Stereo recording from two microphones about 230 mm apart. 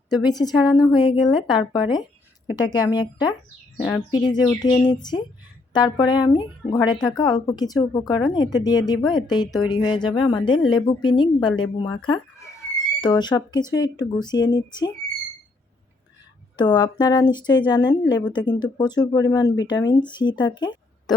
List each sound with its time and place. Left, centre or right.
0.1 s a woman's voice: centre
16.6 s a woman's voice: centre